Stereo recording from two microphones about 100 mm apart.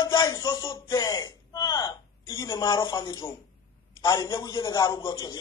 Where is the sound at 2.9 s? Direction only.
45° left (ahead or behind).